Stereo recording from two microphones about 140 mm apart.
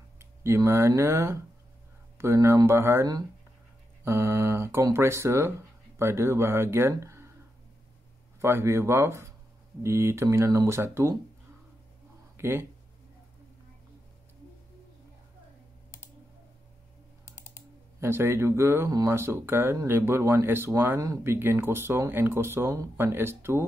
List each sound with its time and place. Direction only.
0.2 s speech: 20° right (ahead or behind)
8.4 s speech: 20° right (ahead or behind)
12.4 s speech: 15° right (ahead or behind)
18.0 s speech: 15° right (ahead or behind)